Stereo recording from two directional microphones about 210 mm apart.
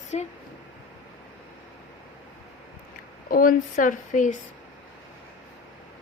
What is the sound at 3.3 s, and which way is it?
A woman's voice, 40° left (ahead or behind).